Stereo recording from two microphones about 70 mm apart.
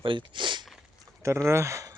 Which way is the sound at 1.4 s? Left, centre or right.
Right.